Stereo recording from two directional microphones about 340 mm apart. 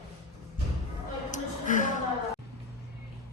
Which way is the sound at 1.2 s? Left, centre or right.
Left.